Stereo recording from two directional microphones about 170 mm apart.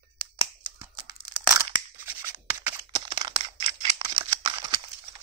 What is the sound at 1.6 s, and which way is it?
Tearing, 15° right (ahead or behind).